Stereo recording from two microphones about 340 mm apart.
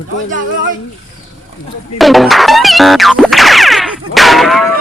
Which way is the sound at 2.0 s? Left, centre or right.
Centre.